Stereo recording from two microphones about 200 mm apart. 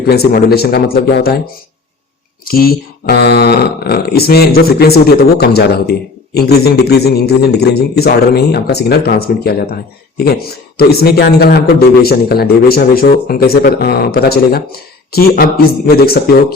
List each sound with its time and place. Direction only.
0.0 s speech: 50° left (ahead or behind)
2.4 s speech: 45° left (ahead or behind)